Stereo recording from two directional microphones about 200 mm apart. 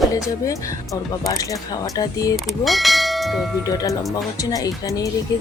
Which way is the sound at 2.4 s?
Centre (ahead or behind).